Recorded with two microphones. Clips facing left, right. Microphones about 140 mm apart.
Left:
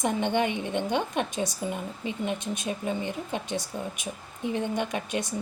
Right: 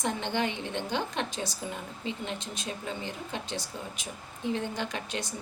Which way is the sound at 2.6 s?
15° left (ahead or behind).